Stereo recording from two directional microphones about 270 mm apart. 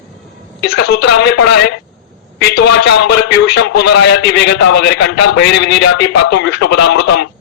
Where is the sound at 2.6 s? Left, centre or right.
Left.